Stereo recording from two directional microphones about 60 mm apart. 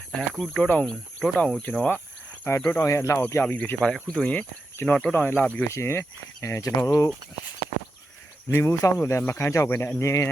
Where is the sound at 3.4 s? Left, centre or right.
Left.